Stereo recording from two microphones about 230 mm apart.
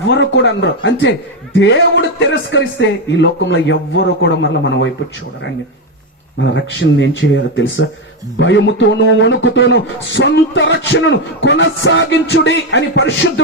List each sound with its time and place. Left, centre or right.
0.0 s a man's voice: left
6.4 s a man's voice: left